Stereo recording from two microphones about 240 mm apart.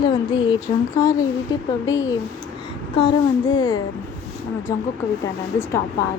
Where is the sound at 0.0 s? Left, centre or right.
Centre.